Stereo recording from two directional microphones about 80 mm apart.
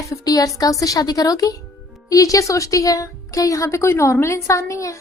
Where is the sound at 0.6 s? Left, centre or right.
Left.